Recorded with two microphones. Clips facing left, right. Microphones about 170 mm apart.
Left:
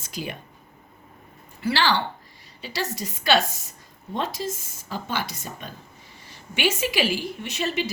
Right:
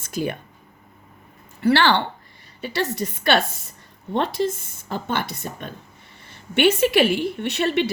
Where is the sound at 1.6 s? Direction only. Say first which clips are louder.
Right 5 dB; 60° right (ahead or behind).